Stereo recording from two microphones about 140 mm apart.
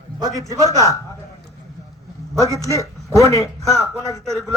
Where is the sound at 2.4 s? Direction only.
20° right (ahead or behind).